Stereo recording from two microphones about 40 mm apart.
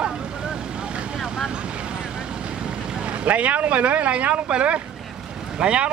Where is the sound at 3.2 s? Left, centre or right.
Right.